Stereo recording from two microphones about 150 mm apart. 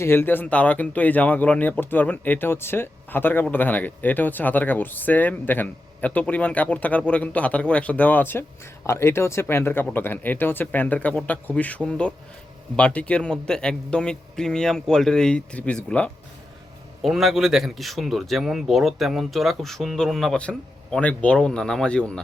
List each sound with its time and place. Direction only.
0.0 s speech: 15° left (ahead or behind)